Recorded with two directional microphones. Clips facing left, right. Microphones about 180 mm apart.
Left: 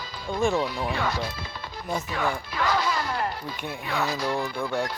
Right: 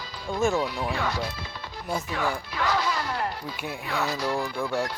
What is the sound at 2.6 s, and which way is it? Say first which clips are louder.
Music: left 1 dB; 45° left (ahead or behind).